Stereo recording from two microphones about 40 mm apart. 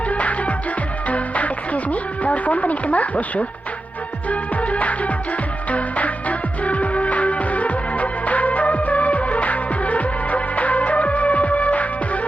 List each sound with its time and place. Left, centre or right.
0.1 s music: left